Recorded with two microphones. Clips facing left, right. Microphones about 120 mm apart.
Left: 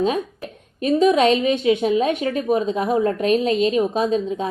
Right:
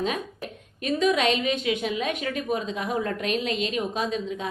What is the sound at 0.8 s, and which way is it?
A woman's voice, 35° left (ahead or behind).